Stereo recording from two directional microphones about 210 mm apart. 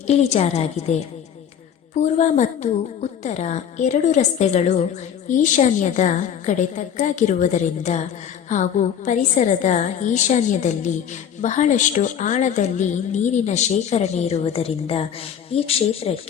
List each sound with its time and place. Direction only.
0.1 s a woman's voice: 30° left (ahead or behind)